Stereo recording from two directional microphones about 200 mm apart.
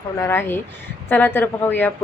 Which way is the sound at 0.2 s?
10° left (ahead or behind).